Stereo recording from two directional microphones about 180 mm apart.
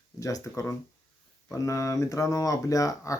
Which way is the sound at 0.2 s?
20° left (ahead or behind).